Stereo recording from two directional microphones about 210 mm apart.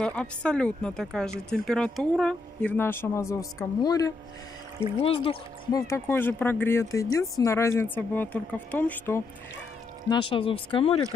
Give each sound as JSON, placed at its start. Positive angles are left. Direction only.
{"t": 0.0, "sound": "speech", "side_deg": 5}
{"t": 5.8, "sound": "speech", "side_deg": 15}
{"t": 10.0, "sound": "speech", "side_deg": 25}